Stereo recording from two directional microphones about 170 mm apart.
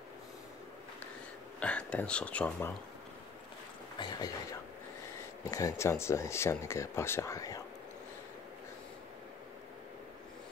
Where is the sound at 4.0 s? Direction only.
25° left (ahead or behind).